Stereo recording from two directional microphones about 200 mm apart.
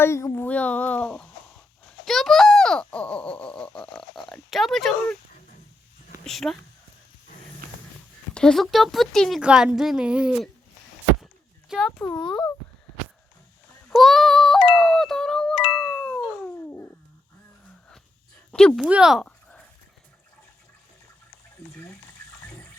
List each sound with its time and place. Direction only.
0.0 s a child's voice: 15° left (ahead or behind)
6.2 s speech: centre (ahead or behind)
8.3 s speech: 5° left (ahead or behind)
11.7 s speech: centre (ahead or behind)
12.0 s a child's voice: 15° left (ahead or behind)
13.9 s music: centre (ahead or behind)
15.7 s doorbell: 5° left (ahead or behind)
18.5 s speech: 5° left (ahead or behind)
18.9 s a sound: 5° right (ahead or behind)